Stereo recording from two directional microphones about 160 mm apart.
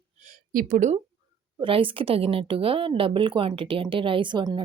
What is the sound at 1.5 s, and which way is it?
Speech, 35° right (ahead or behind).